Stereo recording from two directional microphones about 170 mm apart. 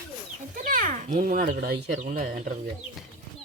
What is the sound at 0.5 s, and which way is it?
Speech, 50° right (ahead or behind).